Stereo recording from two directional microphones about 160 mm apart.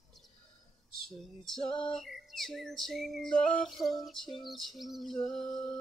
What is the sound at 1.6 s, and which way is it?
Female singing, 30° left (ahead or behind).